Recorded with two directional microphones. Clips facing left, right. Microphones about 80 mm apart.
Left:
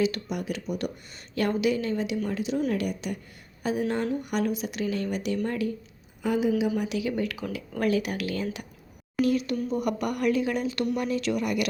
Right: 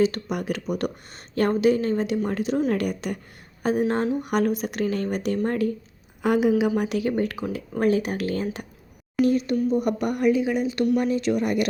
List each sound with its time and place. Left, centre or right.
0.0 s speech: right
0.3 s speech: right
6.2 s a woman's voice: right
9.2 s speech: centre
9.7 s speech: right
10.9 s speech: right